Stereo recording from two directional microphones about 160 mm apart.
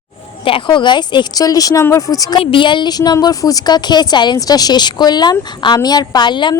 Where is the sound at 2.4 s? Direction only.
30° left (ahead or behind).